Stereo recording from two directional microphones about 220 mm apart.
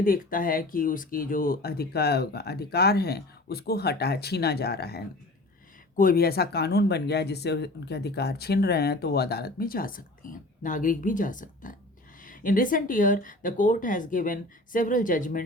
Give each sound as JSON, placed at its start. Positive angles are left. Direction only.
{"t": 0.0, "sound": "speech", "side_deg": 40}